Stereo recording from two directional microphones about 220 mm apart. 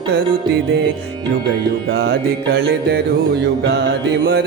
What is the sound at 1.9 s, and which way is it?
Music, 50° right (ahead or behind).